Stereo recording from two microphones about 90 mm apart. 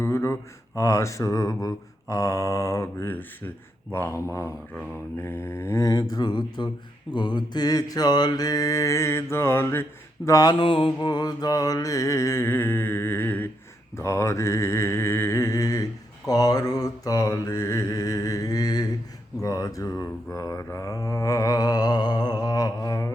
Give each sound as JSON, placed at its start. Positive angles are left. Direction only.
{"t": 0.0, "sound": "a sound", "side_deg": 30}
{"t": 0.8, "sound": "mantra", "side_deg": 35}
{"t": 5.9, "sound": "speech", "side_deg": 50}
{"t": 7.1, "sound": "mantra", "side_deg": 55}
{"t": 10.2, "sound": "mantra", "side_deg": 40}
{"t": 10.5, "sound": "mantra", "side_deg": 80}
{"t": 11.0, "sound": "mantra", "side_deg": 50}
{"t": 13.9, "sound": "mantra", "side_deg": 35}